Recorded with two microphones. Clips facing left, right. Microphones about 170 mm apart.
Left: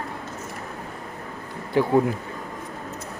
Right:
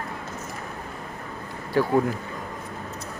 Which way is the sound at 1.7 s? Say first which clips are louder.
Left 2 dB; 20° left (ahead or behind).